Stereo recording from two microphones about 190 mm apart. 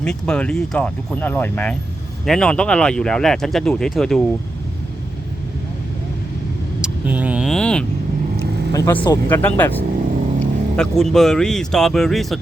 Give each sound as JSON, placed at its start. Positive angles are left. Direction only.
{"t": 0.0, "sound": "speech", "side_deg": 5}
{"t": 6.8, "sound": "vehicle", "side_deg": -5}
{"t": 8.7, "sound": "vehicle", "side_deg": 15}
{"t": 9.3, "sound": "speech", "side_deg": 10}